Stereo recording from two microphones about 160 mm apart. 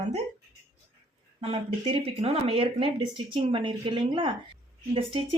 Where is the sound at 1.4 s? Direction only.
35° right (ahead or behind).